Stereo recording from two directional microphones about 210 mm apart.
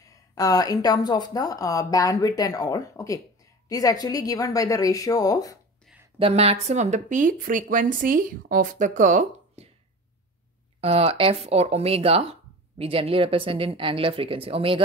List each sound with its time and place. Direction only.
0.1 s a woman's voice: 15° left (ahead or behind)
6.1 s speech: 30° right (ahead or behind)
10.8 s speech: 30° right (ahead or behind)